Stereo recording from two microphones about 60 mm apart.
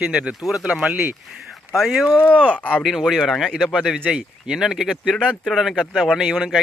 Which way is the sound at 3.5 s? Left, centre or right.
Centre.